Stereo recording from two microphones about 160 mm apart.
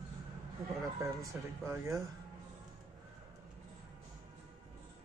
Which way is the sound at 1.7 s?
20° right (ahead or behind).